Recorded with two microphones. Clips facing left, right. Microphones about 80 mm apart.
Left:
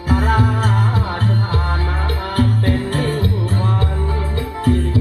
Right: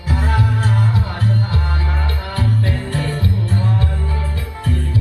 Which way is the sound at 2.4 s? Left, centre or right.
Left.